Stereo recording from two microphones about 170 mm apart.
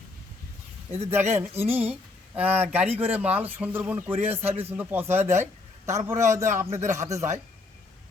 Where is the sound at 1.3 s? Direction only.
10° right (ahead or behind).